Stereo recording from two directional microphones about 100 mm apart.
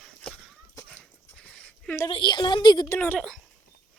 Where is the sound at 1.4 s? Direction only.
10° left (ahead or behind).